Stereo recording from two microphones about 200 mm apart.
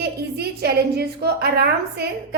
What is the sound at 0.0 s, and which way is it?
A woman's voice, 55° right (ahead or behind).